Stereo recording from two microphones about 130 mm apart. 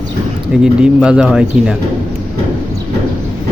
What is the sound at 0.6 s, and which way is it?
Speech, 5° right (ahead or behind).